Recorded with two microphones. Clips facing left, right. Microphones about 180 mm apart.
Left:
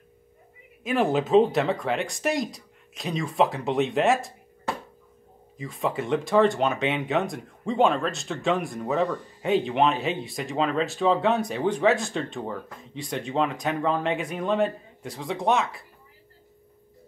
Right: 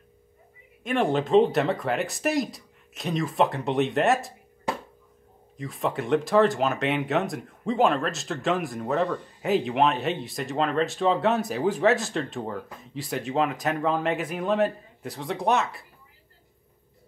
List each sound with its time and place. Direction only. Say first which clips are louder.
0.8 s speech: left 1 dB; 5° left (ahead or behind)
5.6 s speech: even; centre (ahead or behind)